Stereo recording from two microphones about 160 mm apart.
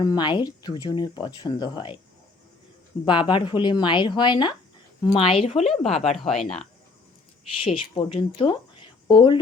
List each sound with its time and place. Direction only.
0.0 s speech: 25° left (ahead or behind)
3.1 s a woman's voice: 30° left (ahead or behind)
6.1 s speech: centre (ahead or behind)
7.6 s speech: 35° left (ahead or behind)